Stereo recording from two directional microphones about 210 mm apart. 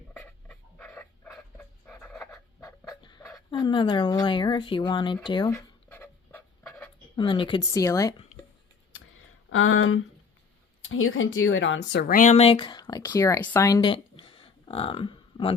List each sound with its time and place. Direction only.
0.1 s dog: 5° left (ahead or behind)
2.3 s a sound: 15° left (ahead or behind)
3.5 s speech: 20° left (ahead or behind)
5.5 s writing: 10° left (ahead or behind)
7.2 s speech: 20° left (ahead or behind)
9.5 s speech: 75° left (ahead or behind); by 15.5 s 25° left (ahead or behind)